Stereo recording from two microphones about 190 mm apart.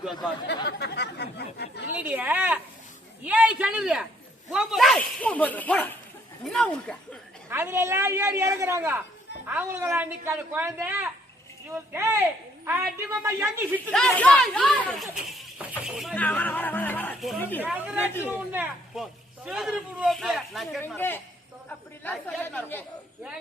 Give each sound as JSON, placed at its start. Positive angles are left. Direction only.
{"t": 0.4, "sound": "chatter", "side_deg": 60}
{"t": 1.9, "sound": "a sound", "side_deg": -10}
{"t": 4.5, "sound": "speech", "side_deg": 0}
{"t": 7.5, "sound": "speech", "side_deg": -10}
{"t": 13.9, "sound": "speech", "side_deg": 5}
{"t": 18.0, "sound": "speech", "side_deg": 10}
{"t": 18.3, "sound": "speech", "side_deg": -10}
{"t": 20.8, "sound": "speech", "side_deg": 10}